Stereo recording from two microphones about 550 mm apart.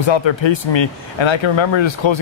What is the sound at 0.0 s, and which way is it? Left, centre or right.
Speech, left.